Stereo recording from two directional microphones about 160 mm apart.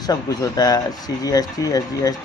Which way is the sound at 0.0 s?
25° left (ahead or behind).